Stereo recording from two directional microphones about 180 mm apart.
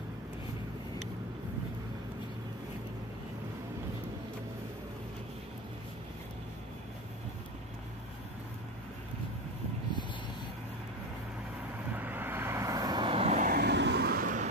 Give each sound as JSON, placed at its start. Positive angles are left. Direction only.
{"t": 11.9, "sound": "vehicle", "side_deg": -10}
{"t": 13.5, "sound": "vehicle", "side_deg": -65}